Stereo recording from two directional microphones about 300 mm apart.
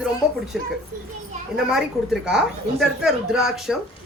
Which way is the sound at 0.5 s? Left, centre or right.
Centre.